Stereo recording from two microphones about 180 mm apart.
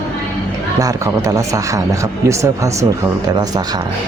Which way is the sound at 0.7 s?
20° right (ahead or behind).